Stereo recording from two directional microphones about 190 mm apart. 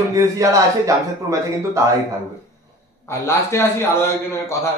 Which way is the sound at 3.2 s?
15° left (ahead or behind).